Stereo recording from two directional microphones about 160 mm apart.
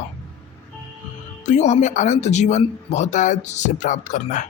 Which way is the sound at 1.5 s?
45° left (ahead or behind).